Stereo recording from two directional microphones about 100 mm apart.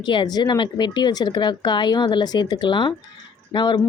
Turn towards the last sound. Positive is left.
turn(degrees=50)  # may be behind; listen again after turning